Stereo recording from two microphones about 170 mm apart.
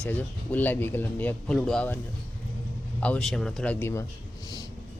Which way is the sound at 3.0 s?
5° left (ahead or behind).